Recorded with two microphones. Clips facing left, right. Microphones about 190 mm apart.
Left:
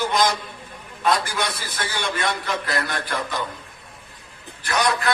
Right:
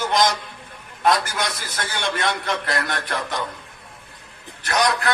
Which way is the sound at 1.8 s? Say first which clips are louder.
Right 1 dB; 65° right (ahead or behind).